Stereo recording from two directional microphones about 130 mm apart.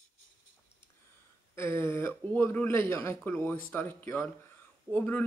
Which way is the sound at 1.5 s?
20° left (ahead or behind).